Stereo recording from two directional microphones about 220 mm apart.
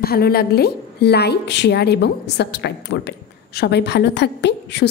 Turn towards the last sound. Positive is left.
turn(degrees=50)  # may be behind; listen again after turning